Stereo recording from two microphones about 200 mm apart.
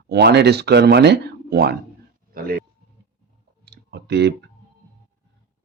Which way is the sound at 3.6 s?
55° right (ahead or behind).